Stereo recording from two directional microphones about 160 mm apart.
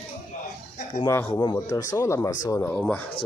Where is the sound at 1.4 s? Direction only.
25° left (ahead or behind); by 3.0 s 10° left (ahead or behind).